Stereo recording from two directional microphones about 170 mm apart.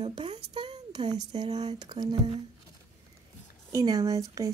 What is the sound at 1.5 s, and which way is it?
Speech, 40° right (ahead or behind).